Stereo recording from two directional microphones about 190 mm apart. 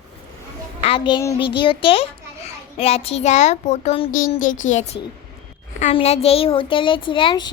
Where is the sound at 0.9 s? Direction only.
25° left (ahead or behind).